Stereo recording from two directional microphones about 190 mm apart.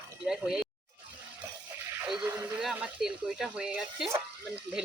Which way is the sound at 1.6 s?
10° right (ahead or behind).